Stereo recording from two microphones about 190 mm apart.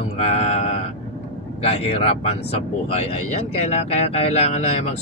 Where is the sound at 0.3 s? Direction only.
35° left (ahead or behind).